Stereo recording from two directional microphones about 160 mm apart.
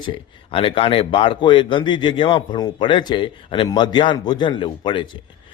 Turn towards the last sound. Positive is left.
turn(degrees=30)  # may be behind; listen again after turning